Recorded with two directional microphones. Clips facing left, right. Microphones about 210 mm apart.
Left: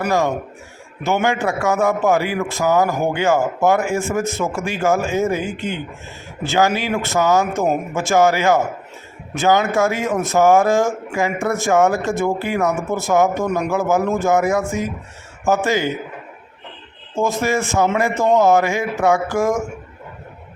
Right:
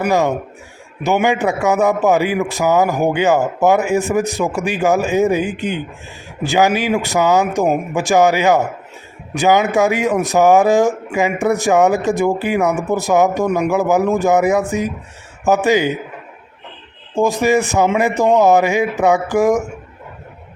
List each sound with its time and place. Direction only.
0.0 s a man's voice: 15° right (ahead or behind)
17.2 s a man's voice: 15° right (ahead or behind)